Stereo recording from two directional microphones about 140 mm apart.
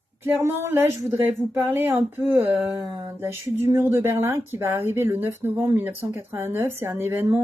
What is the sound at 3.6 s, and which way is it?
Speech, 20° right (ahead or behind).